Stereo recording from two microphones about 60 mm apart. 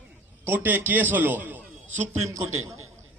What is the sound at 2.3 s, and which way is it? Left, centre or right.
Speech, right.